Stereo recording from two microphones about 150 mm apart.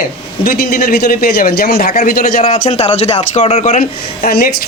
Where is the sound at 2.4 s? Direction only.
40° left (ahead or behind).